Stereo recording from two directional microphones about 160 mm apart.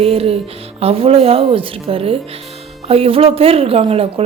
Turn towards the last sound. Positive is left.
turn(degrees=-35)  # may be behind; listen again after turning